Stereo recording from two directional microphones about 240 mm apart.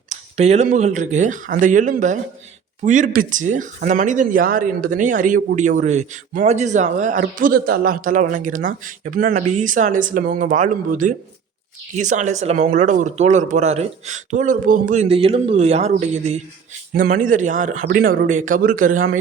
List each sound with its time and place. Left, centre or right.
0.1 s speech: right